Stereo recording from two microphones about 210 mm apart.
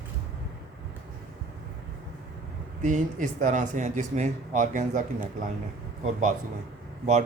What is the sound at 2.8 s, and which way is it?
Speech, 35° right (ahead or behind).